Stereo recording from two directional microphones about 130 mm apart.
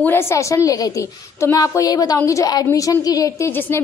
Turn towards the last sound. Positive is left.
turn(degrees=20)  # may be behind; listen again after turning